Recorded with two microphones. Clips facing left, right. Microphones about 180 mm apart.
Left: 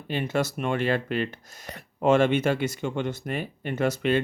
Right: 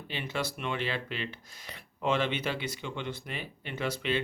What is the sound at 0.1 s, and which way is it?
Speech, 45° left (ahead or behind).